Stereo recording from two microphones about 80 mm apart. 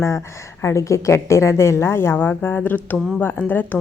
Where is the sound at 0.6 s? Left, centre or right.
Left.